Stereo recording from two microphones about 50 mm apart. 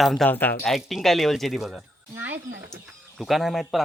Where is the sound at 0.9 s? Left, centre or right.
Centre.